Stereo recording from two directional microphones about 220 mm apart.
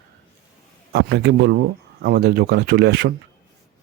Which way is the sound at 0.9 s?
50° right (ahead or behind).